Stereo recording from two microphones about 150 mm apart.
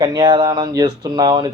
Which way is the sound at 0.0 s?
30° right (ahead or behind).